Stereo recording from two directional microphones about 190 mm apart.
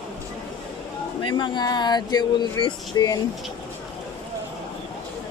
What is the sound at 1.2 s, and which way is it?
Speech, 25° left (ahead or behind).